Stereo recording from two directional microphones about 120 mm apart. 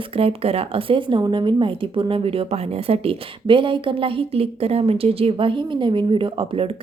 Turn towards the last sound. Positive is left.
turn(degrees=-50)  # may be behind; listen again after turning